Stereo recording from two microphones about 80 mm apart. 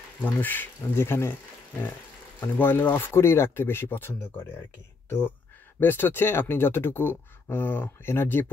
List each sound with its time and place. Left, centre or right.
0.2 s speech: left
2.4 s speech: left
5.8 s speech: left